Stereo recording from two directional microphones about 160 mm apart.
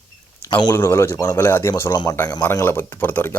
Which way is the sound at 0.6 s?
15° left (ahead or behind).